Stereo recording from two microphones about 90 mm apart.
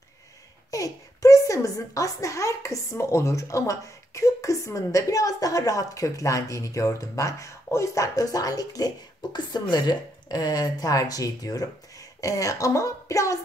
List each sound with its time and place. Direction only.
0.7 s a child's voice: 40° left (ahead or behind)